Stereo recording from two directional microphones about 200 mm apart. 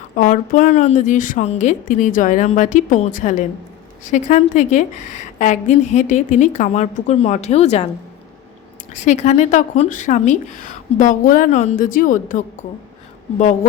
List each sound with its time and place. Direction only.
0.2 s a woman's voice: 40° left (ahead or behind)
9.0 s a woman's voice: 35° left (ahead or behind)